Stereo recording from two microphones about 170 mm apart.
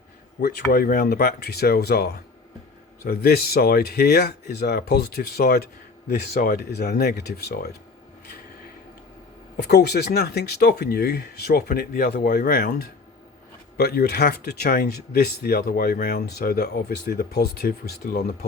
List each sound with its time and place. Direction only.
0.7 s speech: 60° left (ahead or behind)
9.6 s speech: 70° left (ahead or behind)